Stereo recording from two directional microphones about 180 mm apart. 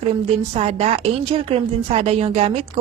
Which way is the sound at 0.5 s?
35° right (ahead or behind).